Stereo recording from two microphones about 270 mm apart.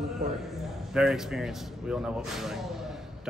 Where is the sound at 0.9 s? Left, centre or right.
Centre.